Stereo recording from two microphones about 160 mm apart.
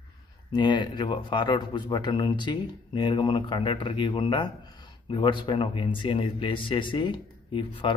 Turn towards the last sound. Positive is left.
turn(degrees=30)  # may be behind; listen again after turning